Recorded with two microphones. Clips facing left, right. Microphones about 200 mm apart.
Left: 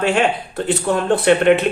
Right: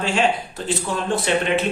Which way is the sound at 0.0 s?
60° left (ahead or behind).